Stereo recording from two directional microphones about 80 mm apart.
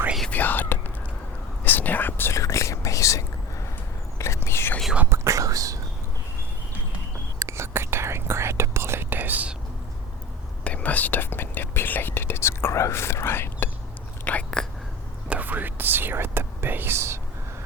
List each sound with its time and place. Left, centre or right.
0.3 s whispering: left
2.4 s whispering: left
5.0 s whispering: right
7.3 s whispering: right; by 9.6 s centre
10.6 s whispering: centre
14.3 s whispering: centre
15.3 s whispering: right